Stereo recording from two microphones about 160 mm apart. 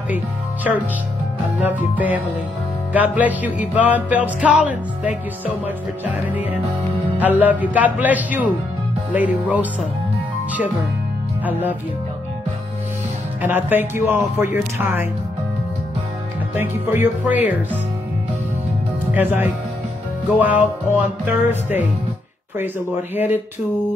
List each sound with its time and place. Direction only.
1.6 s music: 10° right (ahead or behind)
13.4 s music: 10° right (ahead or behind)
16.5 s music: 10° right (ahead or behind)
19.1 s music: 10° right (ahead or behind)
23.1 s music: 10° right (ahead or behind)